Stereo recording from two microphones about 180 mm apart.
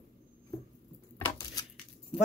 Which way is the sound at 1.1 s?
20° left (ahead or behind).